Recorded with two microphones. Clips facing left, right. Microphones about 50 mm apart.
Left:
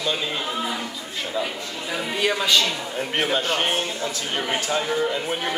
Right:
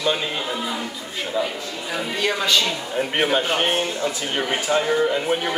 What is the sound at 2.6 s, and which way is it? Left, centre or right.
Speech, centre.